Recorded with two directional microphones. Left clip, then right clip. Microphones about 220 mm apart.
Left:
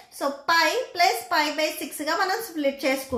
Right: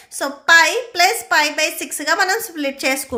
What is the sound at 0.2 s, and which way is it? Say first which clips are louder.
A woman's voice: right 9 dB; 35° right (ahead or behind).